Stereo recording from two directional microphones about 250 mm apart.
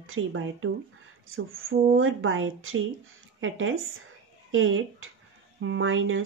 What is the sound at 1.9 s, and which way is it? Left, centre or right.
Speech, right.